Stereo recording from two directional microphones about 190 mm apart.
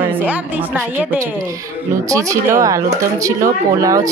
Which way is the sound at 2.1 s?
15° right (ahead or behind).